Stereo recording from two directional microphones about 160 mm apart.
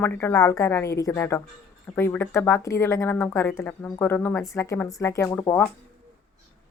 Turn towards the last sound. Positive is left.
turn(degrees=15)  # may be behind; listen again after turning